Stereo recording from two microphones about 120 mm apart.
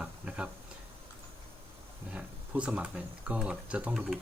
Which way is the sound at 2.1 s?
10° right (ahead or behind).